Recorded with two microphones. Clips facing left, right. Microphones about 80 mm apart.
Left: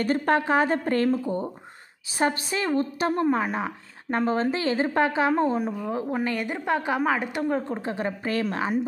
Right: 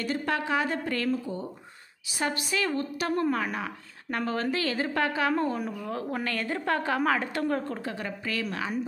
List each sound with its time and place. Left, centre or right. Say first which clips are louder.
0.0 s a woman's voice: left 6 dB; left; by 7.9 s centre
7.9 s a woman's voice: left 6 dB; left